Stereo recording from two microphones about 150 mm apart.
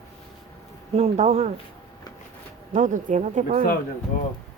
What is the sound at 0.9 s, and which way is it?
Speech, 45° right (ahead or behind).